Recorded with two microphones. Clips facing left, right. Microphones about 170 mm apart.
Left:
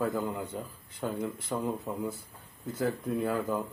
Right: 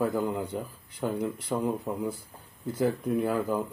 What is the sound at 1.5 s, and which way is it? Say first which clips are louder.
Speech: right 4 dB; 15° right (ahead or behind).